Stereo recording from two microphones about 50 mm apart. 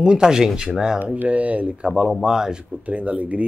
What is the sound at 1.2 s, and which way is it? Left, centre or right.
Speech, right.